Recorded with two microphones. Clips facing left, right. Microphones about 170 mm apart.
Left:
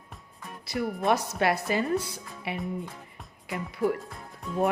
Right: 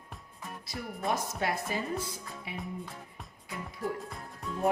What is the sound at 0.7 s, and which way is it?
Speech, 75° left (ahead or behind).